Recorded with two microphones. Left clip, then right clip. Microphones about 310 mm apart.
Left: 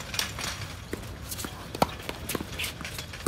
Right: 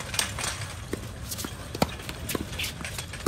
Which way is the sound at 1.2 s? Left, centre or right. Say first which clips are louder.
Right 1 dB; centre.